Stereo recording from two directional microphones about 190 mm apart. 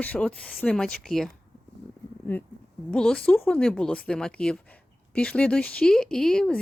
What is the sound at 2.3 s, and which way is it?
Speech, 10° left (ahead or behind).